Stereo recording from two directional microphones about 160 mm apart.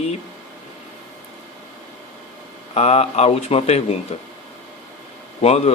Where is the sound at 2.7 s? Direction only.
40° left (ahead or behind).